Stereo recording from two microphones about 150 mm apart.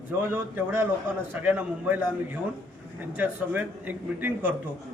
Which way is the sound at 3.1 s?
10° right (ahead or behind).